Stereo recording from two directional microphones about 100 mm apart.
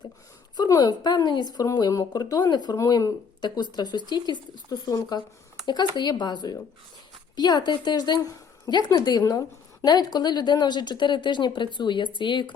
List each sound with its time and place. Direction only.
0.5 s a woman's voice: 40° left (ahead or behind)